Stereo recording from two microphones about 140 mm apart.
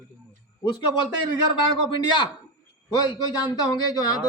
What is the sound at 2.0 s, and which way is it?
A man's voice, 35° left (ahead or behind).